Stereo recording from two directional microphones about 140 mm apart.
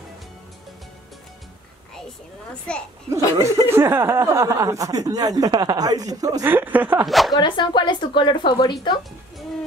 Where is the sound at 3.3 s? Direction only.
20° right (ahead or behind).